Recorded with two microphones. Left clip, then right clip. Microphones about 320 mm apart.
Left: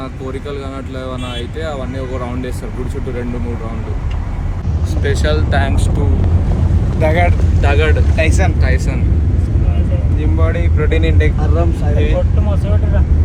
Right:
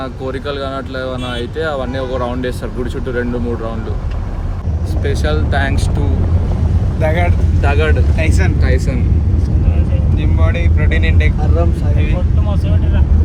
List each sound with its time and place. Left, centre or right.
1.5 s speech: centre
5.0 s speech: centre
7.0 s speech: centre
8.1 s speech: centre
10.4 s speech: centre